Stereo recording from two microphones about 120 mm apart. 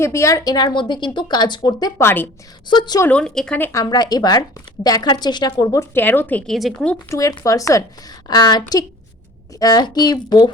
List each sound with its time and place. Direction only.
0.0 s a woman's voice: 25° left (ahead or behind)
2.0 s speech: 20° left (ahead or behind)
2.6 s a woman's voice: 35° left (ahead or behind)
3.0 s speech: 10° left (ahead or behind)
3.6 s a woman's voice: 30° left (ahead or behind)
6.5 s speech: centre (ahead or behind)
7.1 s a woman's voice: 30° left (ahead or behind)